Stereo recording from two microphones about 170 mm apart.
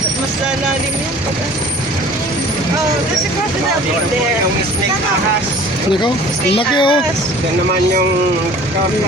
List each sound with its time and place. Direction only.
6.6 s speech: 30° left (ahead or behind)